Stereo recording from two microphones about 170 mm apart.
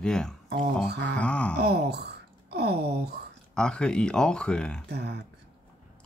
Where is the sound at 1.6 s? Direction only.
75° right (ahead or behind).